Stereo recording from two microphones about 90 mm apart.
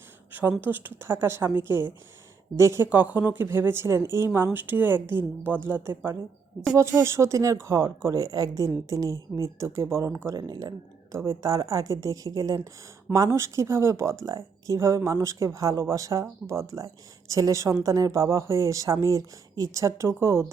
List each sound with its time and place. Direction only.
0.6 s speech: 20° right (ahead or behind)